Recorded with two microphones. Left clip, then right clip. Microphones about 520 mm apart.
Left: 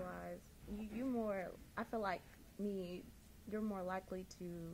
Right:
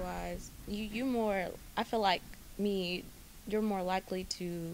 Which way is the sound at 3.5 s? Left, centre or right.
Right.